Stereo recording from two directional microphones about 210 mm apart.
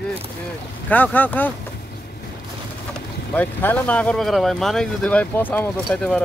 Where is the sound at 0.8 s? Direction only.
10° left (ahead or behind).